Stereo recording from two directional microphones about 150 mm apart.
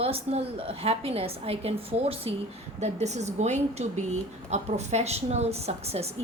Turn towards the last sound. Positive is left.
turn(degrees=-45)  # may be behind; listen again after turning